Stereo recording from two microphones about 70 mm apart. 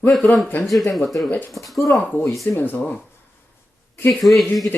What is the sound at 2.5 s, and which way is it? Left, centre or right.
Speech, left.